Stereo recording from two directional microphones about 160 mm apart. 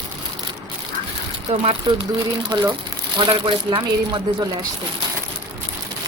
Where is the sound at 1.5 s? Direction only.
40° right (ahead or behind).